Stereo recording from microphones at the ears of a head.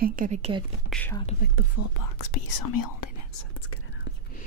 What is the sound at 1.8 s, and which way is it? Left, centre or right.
Speech, left.